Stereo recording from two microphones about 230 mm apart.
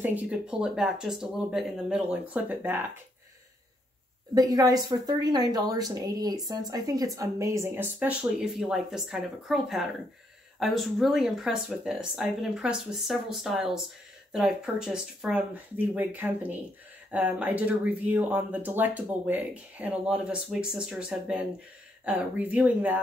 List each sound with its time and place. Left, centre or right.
0.0 s speech: centre
4.3 s a woman's voice: centre